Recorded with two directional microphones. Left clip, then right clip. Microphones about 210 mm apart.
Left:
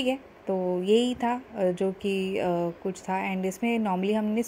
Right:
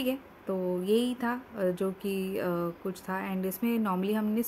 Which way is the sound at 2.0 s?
30° left (ahead or behind).